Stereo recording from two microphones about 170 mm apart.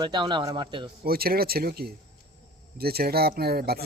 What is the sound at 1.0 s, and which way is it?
A man's voice, 65° right (ahead or behind).